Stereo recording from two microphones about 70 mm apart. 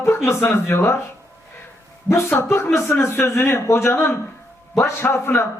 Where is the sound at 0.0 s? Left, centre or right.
Left.